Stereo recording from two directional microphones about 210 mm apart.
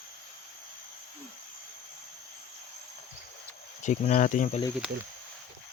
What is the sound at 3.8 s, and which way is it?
Speech, 35° left (ahead or behind).